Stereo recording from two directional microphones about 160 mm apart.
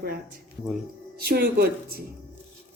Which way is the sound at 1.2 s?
75° right (ahead or behind).